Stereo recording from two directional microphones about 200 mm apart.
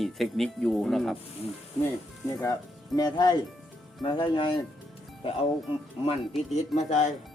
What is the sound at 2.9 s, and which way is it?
Speech, 20° left (ahead or behind).